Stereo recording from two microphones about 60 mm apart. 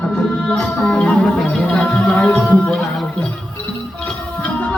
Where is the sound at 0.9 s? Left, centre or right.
Centre.